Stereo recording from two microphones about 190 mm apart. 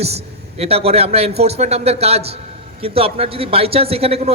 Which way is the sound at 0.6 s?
30° right (ahead or behind).